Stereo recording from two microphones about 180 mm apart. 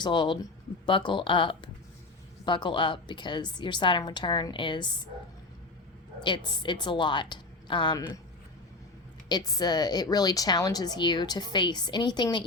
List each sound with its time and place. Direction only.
0.0 s a woman's voice: 25° left (ahead or behind)
6.2 s a woman's voice: 25° left (ahead or behind)
9.3 s a woman's voice: 20° left (ahead or behind)